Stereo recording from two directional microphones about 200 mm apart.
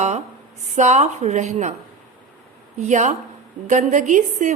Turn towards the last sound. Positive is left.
turn(degrees=-40)  # may be behind; listen again after turning